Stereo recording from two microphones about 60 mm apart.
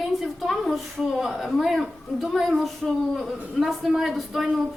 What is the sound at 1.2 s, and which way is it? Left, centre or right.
A woman's voice, centre.